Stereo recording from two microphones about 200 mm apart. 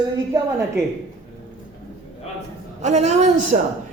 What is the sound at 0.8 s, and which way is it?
Speech, 55° right (ahead or behind).